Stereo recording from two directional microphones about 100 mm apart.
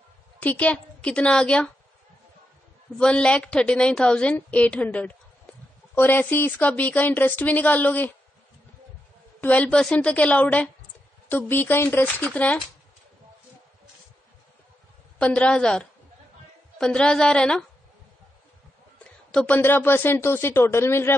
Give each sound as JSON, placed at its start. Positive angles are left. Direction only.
{"t": 0.4, "sound": "a woman's voice", "side_deg": 15}
{"t": 3.0, "sound": "a woman's voice", "side_deg": 10}
{"t": 9.4, "sound": "a woman's voice", "side_deg": 15}
{"t": 15.1, "sound": "a woman's voice", "side_deg": 10}
{"t": 19.3, "sound": "speech", "side_deg": 15}